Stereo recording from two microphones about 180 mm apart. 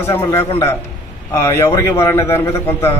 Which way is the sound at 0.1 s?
15° left (ahead or behind).